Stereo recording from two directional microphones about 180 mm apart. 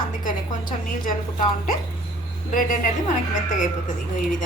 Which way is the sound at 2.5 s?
50° left (ahead or behind).